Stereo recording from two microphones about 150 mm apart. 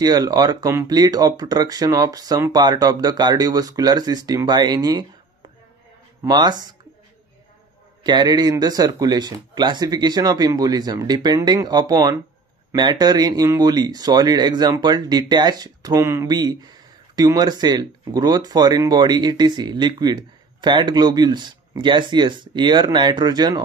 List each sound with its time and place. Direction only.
0.0 s speech: 25° right (ahead or behind)
6.2 s speech: 30° right (ahead or behind)
8.0 s speech: 30° right (ahead or behind)